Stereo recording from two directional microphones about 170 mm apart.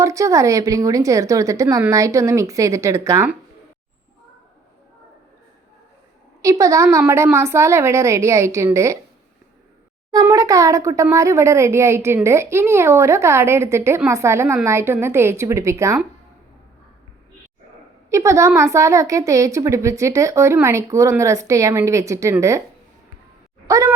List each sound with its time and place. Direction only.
0.0 s a woman's voice: 20° right (ahead or behind)
6.4 s a woman's voice: 20° right (ahead or behind)
10.1 s a woman's voice: 20° right (ahead or behind)
18.1 s a woman's voice: 15° right (ahead or behind)
23.6 s speech: 20° right (ahead or behind)